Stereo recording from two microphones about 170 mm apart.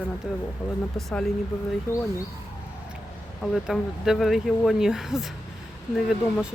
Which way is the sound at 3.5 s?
Centre (ahead or behind).